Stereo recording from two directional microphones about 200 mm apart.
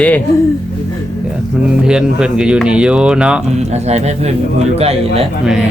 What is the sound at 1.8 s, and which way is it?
Speech, 5° right (ahead or behind).